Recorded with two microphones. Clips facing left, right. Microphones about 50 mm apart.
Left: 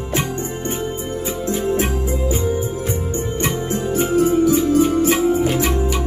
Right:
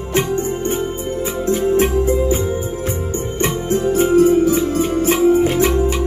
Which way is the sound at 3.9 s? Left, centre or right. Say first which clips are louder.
Right 3 dB; right.